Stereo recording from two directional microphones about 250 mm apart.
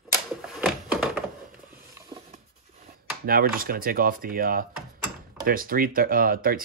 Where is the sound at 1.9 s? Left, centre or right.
Centre.